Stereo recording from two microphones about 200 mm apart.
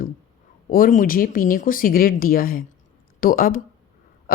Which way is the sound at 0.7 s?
45° left (ahead or behind).